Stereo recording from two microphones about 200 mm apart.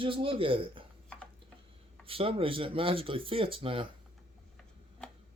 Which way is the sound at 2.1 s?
30° right (ahead or behind).